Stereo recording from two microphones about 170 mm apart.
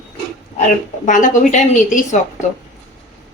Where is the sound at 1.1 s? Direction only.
50° left (ahead or behind).